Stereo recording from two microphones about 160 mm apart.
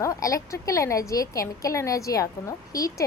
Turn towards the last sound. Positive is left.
turn(degrees=20)  # may be behind; listen again after turning